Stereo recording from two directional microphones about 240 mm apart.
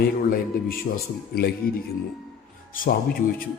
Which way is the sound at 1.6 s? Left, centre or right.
Left.